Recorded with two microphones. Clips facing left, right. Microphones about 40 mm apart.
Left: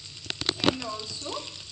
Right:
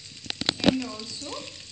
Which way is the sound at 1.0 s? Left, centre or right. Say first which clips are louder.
Left 1 dB; left.